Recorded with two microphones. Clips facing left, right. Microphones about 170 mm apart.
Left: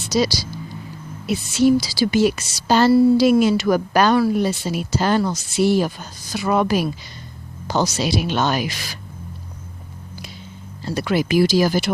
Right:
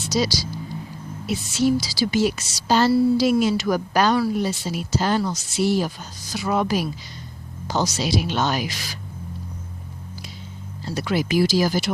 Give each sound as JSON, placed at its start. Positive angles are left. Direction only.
{"t": 0.0, "sound": "a woman's voice", "side_deg": 60}
{"t": 10.8, "sound": "a woman's voice", "side_deg": 60}